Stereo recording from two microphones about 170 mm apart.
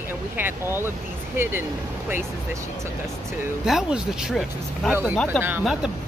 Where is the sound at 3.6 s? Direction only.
5° right (ahead or behind).